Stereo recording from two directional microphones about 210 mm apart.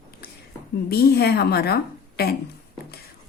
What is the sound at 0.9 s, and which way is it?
Speech, 50° left (ahead or behind).